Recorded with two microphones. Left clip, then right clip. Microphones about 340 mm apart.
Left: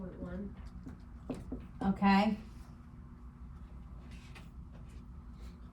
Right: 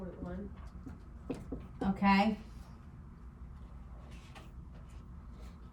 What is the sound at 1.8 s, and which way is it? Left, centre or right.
Speech, centre.